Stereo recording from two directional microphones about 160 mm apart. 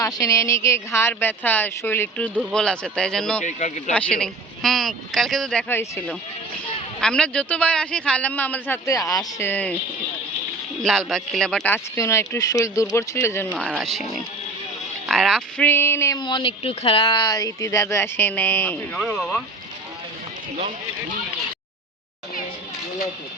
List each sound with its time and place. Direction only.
0.0 s a man's voice: 20° left (ahead or behind); by 3.4 s 5° left (ahead or behind)
3.4 s speech: 45° left (ahead or behind)
3.9 s speech: 5° left (ahead or behind)
5.6 s a man's voice: 10° left (ahead or behind)
10.8 s a man's voice: centre (ahead or behind)
13.7 s speech: centre (ahead or behind)
15.0 s a man's voice: centre (ahead or behind); by 16.2 s 15° left (ahead or behind)
16.2 s speech: 30° left (ahead or behind); by 19.4 s centre (ahead or behind)